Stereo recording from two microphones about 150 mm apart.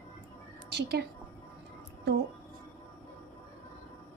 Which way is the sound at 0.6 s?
90° right.